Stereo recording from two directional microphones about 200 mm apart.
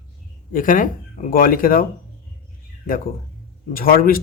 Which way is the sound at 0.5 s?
40° left (ahead or behind).